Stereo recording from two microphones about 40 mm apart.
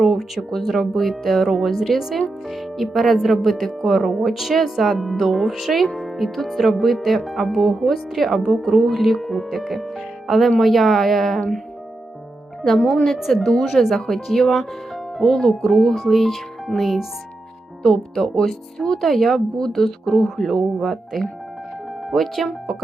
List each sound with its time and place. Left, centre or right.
0.0 s speech: centre
12.6 s speech: centre
13.8 s speech: centre
14.3 s speech: centre